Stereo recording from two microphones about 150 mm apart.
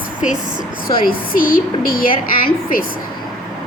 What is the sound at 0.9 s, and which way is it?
A woman's voice, 75° left (ahead or behind).